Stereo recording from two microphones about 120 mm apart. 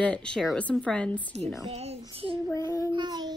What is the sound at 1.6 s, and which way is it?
Speech, 60° right (ahead or behind).